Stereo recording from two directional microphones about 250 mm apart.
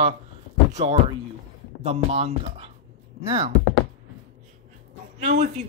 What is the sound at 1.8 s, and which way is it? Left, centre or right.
Speech, right.